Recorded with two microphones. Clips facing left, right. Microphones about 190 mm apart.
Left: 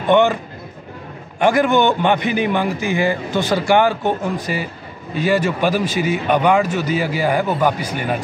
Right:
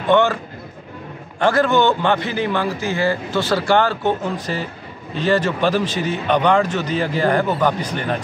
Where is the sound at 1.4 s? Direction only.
15° left (ahead or behind).